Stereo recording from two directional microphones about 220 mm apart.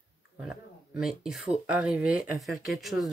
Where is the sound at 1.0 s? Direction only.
Centre (ahead or behind).